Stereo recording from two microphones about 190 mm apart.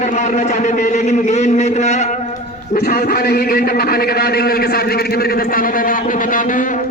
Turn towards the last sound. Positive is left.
turn(degrees=45)  # may be behind; listen again after turning